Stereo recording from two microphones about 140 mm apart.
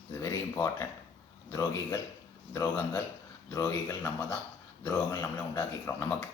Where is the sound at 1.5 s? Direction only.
25° left (ahead or behind).